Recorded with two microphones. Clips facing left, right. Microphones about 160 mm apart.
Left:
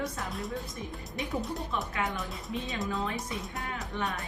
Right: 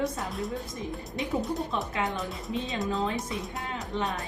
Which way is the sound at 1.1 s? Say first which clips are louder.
Right 3 dB; 20° right (ahead or behind).